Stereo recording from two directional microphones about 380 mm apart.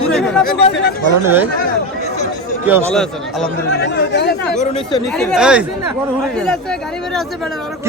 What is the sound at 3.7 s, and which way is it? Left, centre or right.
Speech, left.